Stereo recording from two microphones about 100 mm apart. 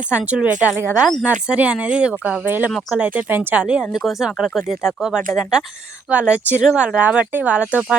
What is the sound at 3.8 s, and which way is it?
Speech, centre (ahead or behind).